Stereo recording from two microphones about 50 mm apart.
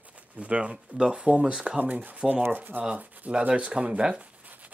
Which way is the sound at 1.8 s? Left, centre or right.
Right.